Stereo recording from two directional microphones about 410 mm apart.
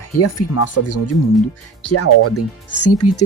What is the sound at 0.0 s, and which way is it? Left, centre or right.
Speech, left.